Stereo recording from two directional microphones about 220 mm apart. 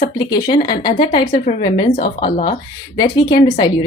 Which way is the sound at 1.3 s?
30° left (ahead or behind).